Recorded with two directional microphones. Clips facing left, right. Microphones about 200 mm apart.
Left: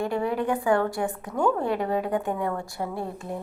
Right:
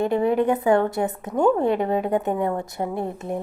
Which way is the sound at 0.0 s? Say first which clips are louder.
Right 6 dB; 20° right (ahead or behind).